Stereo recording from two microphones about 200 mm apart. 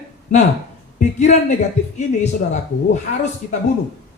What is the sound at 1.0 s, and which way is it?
Speech, 35° left (ahead or behind).